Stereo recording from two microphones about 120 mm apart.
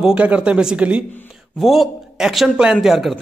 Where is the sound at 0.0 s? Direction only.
10° right (ahead or behind).